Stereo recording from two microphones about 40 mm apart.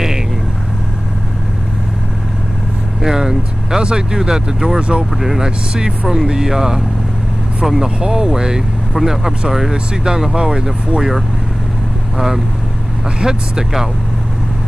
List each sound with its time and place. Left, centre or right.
3.0 s speech: centre
4.7 s speech: right
5.1 s speech: centre
5.4 s speech: centre
8.0 s speech: centre
13.2 s speech: centre